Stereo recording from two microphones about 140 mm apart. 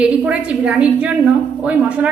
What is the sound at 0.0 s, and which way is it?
A woman's voice, 5° right (ahead or behind).